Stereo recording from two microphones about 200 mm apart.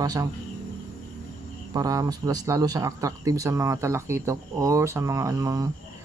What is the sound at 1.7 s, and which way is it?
Speech, 20° right (ahead or behind).